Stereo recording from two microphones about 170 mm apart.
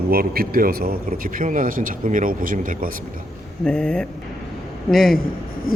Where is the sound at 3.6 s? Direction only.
5° left (ahead or behind).